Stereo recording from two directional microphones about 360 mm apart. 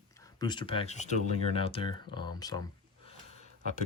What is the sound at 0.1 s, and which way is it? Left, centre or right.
Speech, centre.